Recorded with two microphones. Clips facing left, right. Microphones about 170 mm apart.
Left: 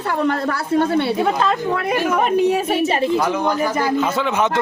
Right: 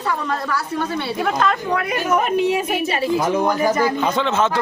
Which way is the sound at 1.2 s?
25° left (ahead or behind).